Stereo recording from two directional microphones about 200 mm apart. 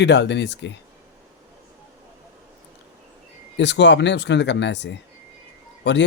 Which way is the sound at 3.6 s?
60° left (ahead or behind).